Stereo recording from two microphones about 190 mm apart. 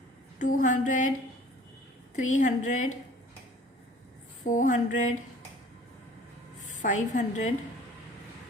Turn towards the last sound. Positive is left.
turn(degrees=40)  # may be behind; listen again after turning